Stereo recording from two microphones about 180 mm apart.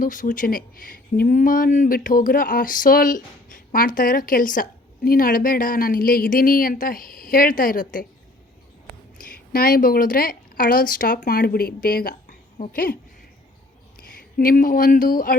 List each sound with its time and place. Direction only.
0.0 s speech: 45° left (ahead or behind)
9.1 s speech: 55° left (ahead or behind)
14.3 s speech: 50° left (ahead or behind)